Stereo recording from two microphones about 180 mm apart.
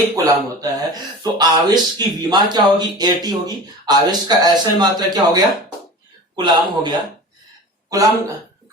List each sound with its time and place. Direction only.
0.2 s speech: 20° right (ahead or behind)